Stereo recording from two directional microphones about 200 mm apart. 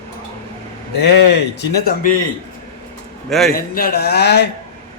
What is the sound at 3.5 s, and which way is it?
Speech, 45° left (ahead or behind).